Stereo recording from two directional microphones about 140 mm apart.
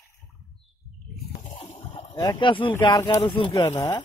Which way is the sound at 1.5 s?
40° left (ahead or behind).